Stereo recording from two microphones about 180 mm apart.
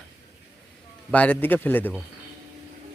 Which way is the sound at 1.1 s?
10° left (ahead or behind).